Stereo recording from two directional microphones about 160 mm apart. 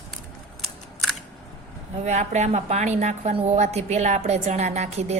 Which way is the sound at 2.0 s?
45° right (ahead or behind).